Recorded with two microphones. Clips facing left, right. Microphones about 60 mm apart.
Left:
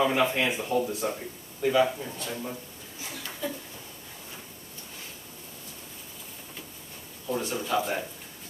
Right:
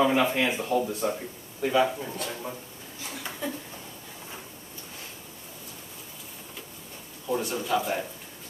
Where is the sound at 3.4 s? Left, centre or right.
Right.